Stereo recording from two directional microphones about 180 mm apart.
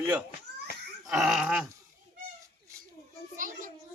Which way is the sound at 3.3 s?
45° right (ahead or behind).